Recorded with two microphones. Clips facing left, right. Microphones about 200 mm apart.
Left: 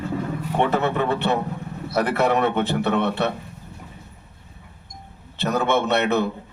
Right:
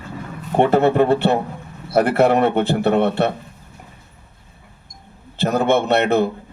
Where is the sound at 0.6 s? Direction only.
50° right (ahead or behind).